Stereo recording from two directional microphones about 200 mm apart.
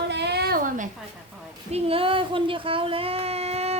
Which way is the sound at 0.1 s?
55° right (ahead or behind).